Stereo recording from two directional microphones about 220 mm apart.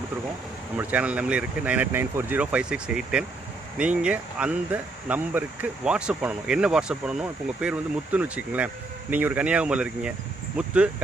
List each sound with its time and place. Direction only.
0.8 s speech: 5° right (ahead or behind)